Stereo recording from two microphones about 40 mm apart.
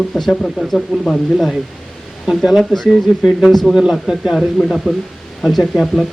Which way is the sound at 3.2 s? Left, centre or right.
Centre.